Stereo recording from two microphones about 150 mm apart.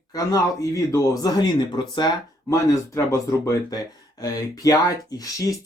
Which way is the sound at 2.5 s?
20° left (ahead or behind).